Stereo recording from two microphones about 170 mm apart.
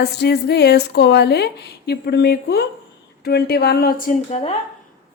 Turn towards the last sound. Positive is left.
turn(degrees=55)  # may be behind; listen again after turning